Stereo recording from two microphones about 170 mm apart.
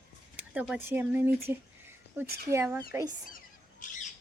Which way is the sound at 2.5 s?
15° right (ahead or behind).